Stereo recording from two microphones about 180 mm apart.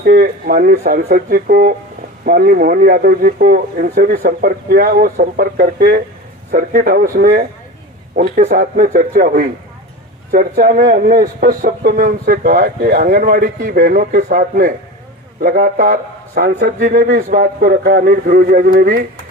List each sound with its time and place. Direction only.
0.0 s a man's voice: 60° right (ahead or behind)